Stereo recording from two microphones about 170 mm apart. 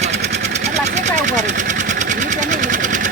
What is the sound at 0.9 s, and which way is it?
Sewing machine, 45° right (ahead or behind).